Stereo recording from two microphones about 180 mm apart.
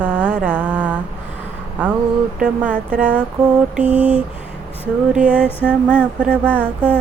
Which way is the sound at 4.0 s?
30° left (ahead or behind).